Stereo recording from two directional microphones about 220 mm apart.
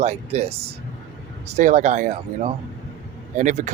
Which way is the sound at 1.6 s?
35° right (ahead or behind).